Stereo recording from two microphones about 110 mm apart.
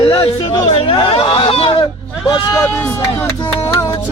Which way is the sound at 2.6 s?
20° left (ahead or behind).